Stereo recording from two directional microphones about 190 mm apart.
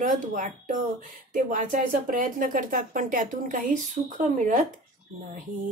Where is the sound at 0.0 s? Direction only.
45° right (ahead or behind).